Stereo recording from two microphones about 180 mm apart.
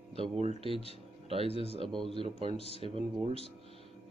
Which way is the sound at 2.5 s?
35° left (ahead or behind).